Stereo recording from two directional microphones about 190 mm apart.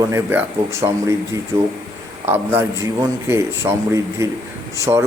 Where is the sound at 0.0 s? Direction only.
15° right (ahead or behind).